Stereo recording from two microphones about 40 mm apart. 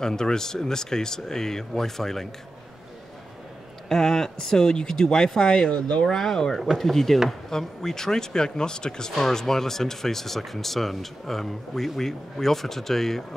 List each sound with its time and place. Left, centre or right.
0.0 s speech: centre
3.9 s speech: centre
6.0 s speech: centre